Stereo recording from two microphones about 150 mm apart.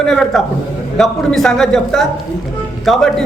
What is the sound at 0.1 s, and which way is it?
A man's voice, 5° left (ahead or behind).